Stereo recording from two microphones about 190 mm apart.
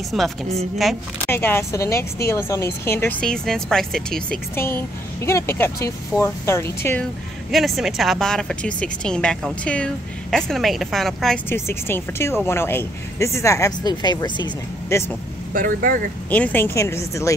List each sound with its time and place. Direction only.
0.1 s a woman's voice: centre (ahead or behind)
1.3 s speech: 10° left (ahead or behind)
7.5 s a woman's voice: centre (ahead or behind)
11.4 s speech: 10° left (ahead or behind)
15.5 s speech: 45° right (ahead or behind)
16.3 s speech: 10° left (ahead or behind)